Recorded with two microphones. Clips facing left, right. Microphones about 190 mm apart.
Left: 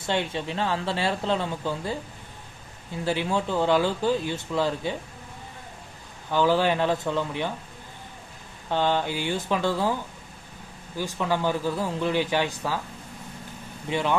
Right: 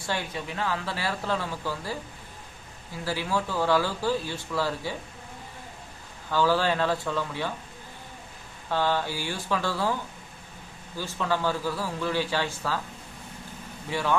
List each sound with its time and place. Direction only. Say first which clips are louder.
0.0 s speech: left 5 dB; 25° left (ahead or behind)
3.0 s speech: left 3 dB; 20° left (ahead or behind)
6.3 s speech: left 2 dB; 20° left (ahead or behind)
8.7 s a man's voice: left 2 dB; 20° left (ahead or behind)
13.9 s speech: left 2 dB; 20° left (ahead or behind)